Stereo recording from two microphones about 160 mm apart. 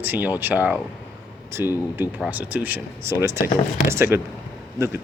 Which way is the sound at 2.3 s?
10° right (ahead or behind).